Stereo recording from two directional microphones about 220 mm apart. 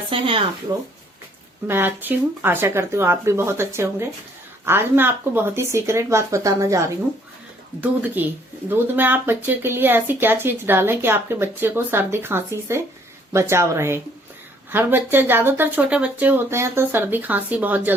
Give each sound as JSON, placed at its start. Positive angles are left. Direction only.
{"t": 0.1, "sound": "speech", "side_deg": -25}
{"t": 1.6, "sound": "speech", "side_deg": -10}